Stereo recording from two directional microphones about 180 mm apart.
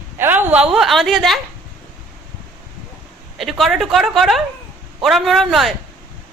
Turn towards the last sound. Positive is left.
turn(degrees=0)  # may be behind; listen again after turning